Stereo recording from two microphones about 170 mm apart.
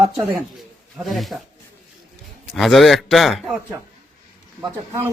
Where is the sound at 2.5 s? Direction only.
Centre (ahead or behind).